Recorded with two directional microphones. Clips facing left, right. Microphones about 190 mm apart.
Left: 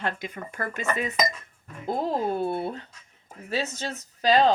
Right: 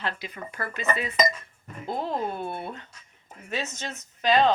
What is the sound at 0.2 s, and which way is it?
Speech, 50° left (ahead or behind).